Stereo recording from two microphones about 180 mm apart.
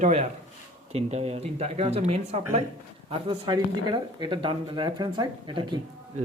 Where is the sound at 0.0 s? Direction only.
40° right (ahead or behind).